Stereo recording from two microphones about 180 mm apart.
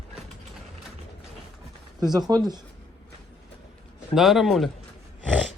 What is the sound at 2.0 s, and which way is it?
Speech, 20° right (ahead or behind).